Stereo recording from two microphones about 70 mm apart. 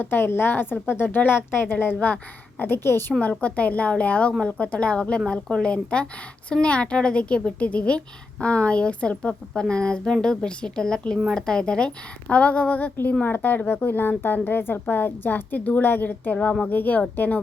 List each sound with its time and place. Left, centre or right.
0.0 s a woman's voice: left
3.2 s a woman's voice: left